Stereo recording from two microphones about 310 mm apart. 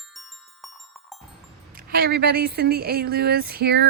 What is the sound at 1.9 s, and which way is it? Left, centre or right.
Speech, right.